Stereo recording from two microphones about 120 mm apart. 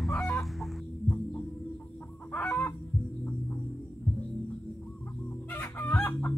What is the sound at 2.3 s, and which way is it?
Chicken, 15° left (ahead or behind).